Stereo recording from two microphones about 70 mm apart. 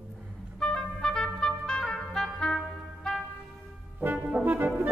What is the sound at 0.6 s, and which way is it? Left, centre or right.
Music, centre.